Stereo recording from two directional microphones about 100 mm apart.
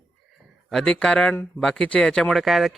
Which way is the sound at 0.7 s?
5° left (ahead or behind).